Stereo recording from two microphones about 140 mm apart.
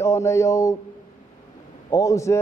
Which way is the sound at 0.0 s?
20° left (ahead or behind).